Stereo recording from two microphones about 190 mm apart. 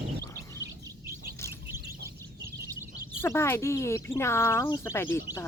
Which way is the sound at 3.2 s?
15° left (ahead or behind).